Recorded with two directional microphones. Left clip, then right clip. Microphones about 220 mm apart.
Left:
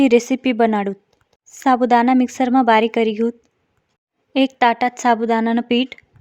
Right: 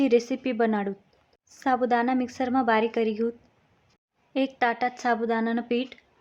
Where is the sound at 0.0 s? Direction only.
40° left (ahead or behind).